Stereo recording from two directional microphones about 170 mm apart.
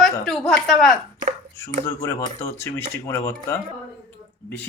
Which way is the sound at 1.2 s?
45° right (ahead or behind).